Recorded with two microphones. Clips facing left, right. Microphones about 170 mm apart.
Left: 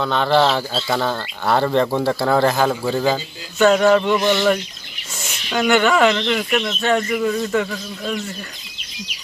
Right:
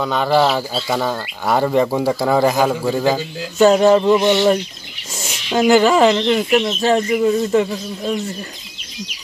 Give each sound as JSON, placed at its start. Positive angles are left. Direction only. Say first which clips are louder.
{"t": 0.0, "sound": "speech", "louder": "right 1 dB", "side_deg": -5}
{"t": 3.5, "sound": "speech", "louder": "right 2 dB", "side_deg": -25}